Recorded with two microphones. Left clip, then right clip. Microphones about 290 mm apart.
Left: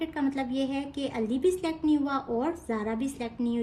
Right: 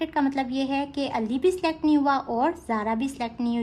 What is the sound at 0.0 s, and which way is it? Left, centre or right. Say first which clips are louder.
A woman's voice: right 5 dB; right.